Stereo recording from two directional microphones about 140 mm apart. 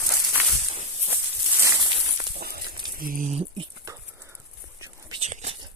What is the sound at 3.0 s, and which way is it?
Speech, 75° right (ahead or behind).